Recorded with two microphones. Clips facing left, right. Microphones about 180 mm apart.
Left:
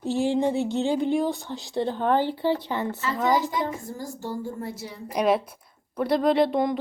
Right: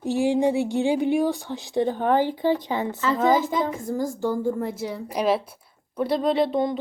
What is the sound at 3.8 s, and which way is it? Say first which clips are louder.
A woman's voice: right 8 dB; 50° right (ahead or behind).